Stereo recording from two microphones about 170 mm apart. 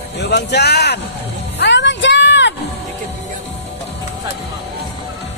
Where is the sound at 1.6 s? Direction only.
90° left.